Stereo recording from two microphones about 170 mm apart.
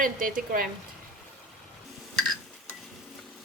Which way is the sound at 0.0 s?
55° right (ahead or behind).